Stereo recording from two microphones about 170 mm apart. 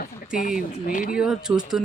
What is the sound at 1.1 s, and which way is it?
Speech, 5° right (ahead or behind).